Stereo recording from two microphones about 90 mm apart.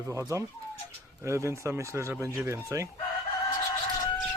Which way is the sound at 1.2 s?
30° right (ahead or behind).